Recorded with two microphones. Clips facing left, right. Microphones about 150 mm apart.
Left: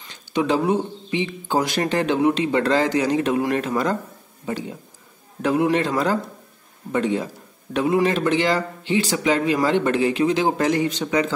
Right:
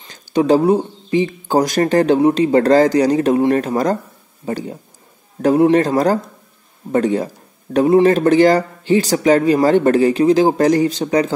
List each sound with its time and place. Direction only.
0.1 s speech: 40° right (ahead or behind)